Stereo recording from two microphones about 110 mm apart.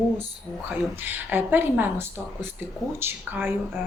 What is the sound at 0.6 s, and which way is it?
A woman's voice, 15° right (ahead or behind).